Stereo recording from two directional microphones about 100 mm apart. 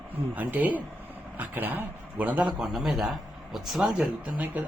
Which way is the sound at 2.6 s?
Centre (ahead or behind).